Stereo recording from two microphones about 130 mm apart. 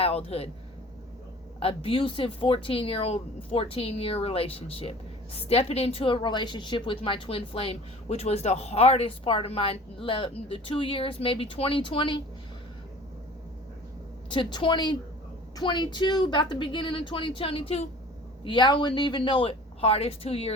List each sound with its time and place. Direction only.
0.0 s speech: 50° left (ahead or behind)
1.5 s speech: 45° left (ahead or behind)
14.3 s a woman's voice: 40° left (ahead or behind)
18.4 s a woman's voice: 35° left (ahead or behind)